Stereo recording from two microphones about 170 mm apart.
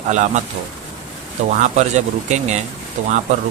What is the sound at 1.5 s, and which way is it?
Speech, 45° right (ahead or behind).